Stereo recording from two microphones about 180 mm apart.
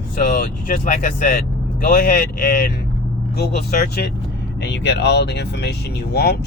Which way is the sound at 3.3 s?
65° left (ahead or behind).